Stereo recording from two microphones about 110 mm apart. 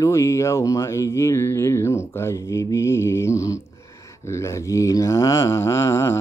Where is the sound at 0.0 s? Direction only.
25° left (ahead or behind).